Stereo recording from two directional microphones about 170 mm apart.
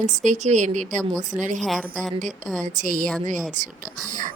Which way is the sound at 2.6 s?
50° right (ahead or behind).